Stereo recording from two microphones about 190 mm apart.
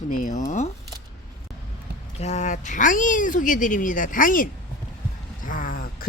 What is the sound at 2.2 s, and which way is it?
Speech, 35° left (ahead or behind).